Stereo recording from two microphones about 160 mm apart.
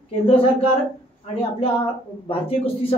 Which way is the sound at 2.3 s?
35° left (ahead or behind).